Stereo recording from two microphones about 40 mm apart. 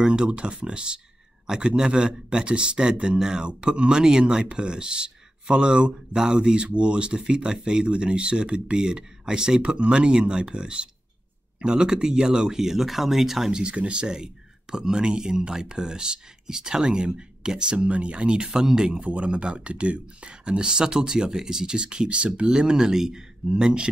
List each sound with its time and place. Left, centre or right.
0.0 s speech: right
13.5 s speech: right
17.7 s speech: right